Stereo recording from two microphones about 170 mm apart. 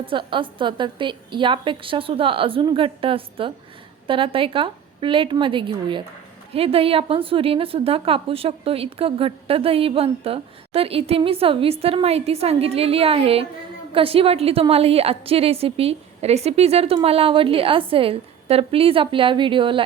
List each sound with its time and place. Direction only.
0.0 s a woman's voice: 30° right (ahead or behind)